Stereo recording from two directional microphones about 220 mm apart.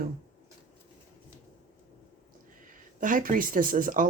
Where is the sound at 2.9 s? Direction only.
35° right (ahead or behind).